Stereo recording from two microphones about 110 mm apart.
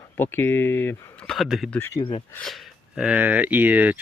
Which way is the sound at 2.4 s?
Centre (ahead or behind).